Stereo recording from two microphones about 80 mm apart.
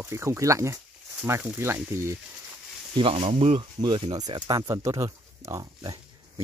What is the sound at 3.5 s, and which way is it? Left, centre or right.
Speech, right.